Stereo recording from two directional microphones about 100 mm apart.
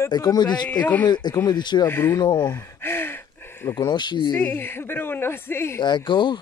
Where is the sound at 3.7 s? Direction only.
50° left (ahead or behind).